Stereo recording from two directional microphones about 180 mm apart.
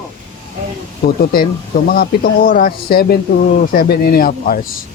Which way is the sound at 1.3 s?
55° left (ahead or behind).